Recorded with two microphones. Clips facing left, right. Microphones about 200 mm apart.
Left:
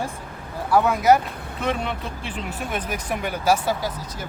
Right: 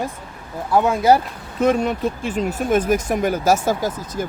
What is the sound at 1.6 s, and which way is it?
Speech, 45° right (ahead or behind).